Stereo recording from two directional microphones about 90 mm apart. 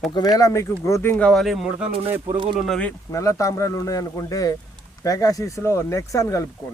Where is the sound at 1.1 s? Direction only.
5° left (ahead or behind).